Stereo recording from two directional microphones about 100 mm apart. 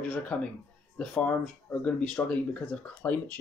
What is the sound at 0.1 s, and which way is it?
Speech, 10° left (ahead or behind).